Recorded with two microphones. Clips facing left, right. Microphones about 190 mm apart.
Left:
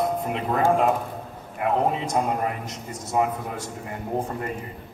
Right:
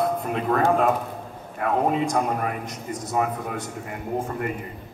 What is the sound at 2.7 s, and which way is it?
Speech, 25° left (ahead or behind).